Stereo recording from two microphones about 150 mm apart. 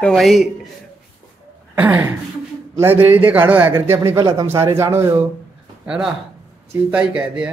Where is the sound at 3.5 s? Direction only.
15° right (ahead or behind).